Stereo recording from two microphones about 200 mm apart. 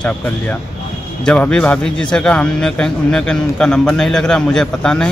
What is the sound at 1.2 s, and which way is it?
A man's voice, 5° left (ahead or behind).